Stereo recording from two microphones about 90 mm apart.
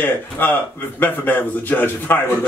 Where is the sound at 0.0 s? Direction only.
20° left (ahead or behind).